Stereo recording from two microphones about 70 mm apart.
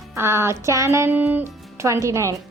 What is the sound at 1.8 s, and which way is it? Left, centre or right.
Speech, right.